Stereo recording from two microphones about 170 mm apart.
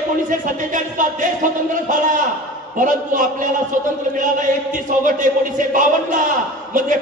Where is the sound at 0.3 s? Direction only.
50° right (ahead or behind).